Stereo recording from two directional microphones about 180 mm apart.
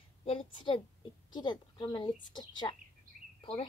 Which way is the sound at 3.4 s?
25° left (ahead or behind).